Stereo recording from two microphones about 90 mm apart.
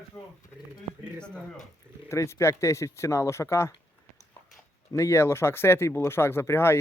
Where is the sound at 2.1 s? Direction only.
35° left (ahead or behind).